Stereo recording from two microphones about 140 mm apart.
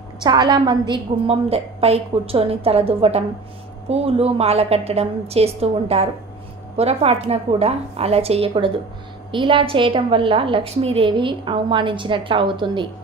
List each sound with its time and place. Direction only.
0.2 s a woman's voice: 30° right (ahead or behind)